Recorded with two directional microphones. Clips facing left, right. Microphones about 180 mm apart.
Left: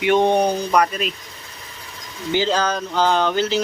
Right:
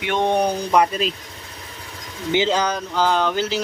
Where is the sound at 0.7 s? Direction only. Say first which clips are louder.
Right 1 dB; 25° right (ahead or behind).